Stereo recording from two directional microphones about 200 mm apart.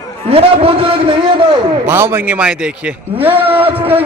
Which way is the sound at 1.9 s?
10° right (ahead or behind).